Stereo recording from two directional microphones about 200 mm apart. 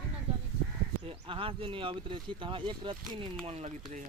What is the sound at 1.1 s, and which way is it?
Speech, 25° right (ahead or behind).